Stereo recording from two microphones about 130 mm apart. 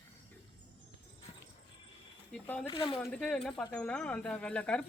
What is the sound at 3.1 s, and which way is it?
Speech, 5° left (ahead or behind).